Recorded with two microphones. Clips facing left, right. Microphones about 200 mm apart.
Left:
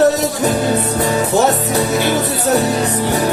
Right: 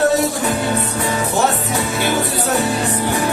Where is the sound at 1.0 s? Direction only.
40° left (ahead or behind).